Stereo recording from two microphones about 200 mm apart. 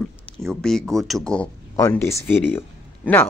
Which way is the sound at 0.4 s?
Centre (ahead or behind).